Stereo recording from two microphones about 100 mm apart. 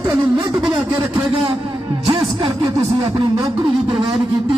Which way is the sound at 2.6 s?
35° right (ahead or behind).